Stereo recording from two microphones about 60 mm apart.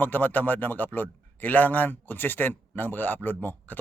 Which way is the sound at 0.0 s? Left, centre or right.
Left.